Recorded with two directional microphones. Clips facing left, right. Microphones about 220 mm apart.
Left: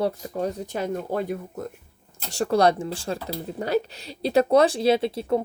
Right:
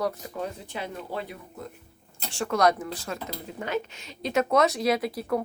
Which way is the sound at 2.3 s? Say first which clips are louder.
Left 4 dB; 35° left (ahead or behind).